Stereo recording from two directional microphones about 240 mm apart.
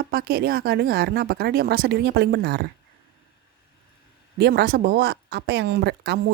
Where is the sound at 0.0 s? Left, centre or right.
Right.